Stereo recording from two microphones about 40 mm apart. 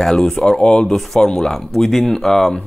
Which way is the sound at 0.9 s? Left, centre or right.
Centre.